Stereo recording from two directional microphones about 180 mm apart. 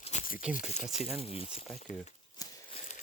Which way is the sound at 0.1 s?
40° left (ahead or behind).